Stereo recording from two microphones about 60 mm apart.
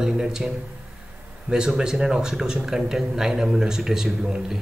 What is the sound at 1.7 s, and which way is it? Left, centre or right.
A man's voice, centre.